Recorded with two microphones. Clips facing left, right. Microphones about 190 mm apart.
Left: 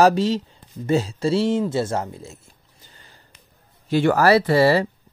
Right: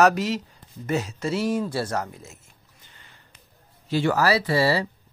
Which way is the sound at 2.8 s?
35° left (ahead or behind).